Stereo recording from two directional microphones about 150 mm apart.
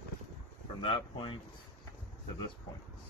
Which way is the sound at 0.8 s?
35° left (ahead or behind).